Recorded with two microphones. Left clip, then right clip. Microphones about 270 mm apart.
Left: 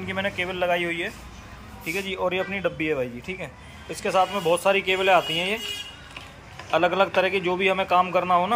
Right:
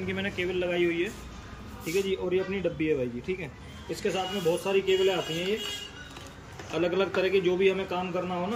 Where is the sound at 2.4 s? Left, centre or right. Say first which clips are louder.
Left 4 dB; left.